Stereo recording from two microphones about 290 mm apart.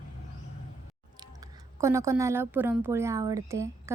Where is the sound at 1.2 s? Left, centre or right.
Centre.